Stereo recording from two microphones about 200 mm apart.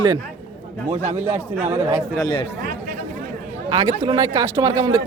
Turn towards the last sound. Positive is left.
turn(degrees=-15)  # may be behind; listen again after turning